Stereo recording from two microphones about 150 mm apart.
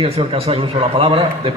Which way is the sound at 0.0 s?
40° right (ahead or behind).